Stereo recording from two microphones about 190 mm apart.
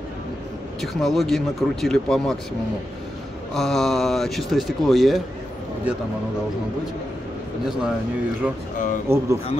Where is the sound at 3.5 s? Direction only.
Centre (ahead or behind).